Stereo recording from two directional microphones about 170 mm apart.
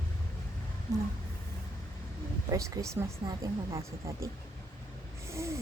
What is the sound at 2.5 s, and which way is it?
Speech, 20° right (ahead or behind).